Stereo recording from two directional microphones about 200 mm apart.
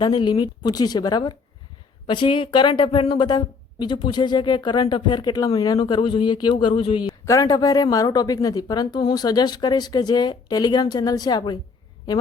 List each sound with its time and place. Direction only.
0.0 s speech: 25° left (ahead or behind)